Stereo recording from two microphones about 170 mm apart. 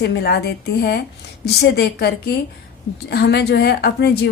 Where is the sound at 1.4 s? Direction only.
70° left (ahead or behind).